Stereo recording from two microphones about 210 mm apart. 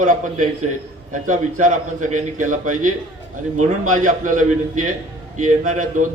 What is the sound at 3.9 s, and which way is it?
A man's voice, 40° right (ahead or behind).